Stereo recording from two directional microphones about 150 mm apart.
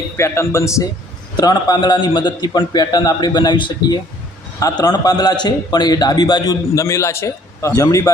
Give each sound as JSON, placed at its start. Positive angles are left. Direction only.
{"t": 0.2, "sound": "a man's voice", "side_deg": 20}